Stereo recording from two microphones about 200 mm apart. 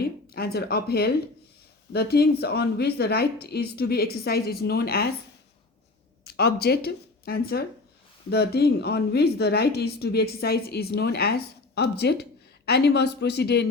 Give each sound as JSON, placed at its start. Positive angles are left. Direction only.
{"t": 0.0, "sound": "a woman's voice", "side_deg": 50}
{"t": 6.2, "sound": "a woman's voice", "side_deg": 55}